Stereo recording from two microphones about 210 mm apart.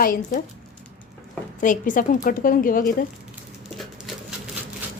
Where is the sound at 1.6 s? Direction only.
40° left (ahead or behind).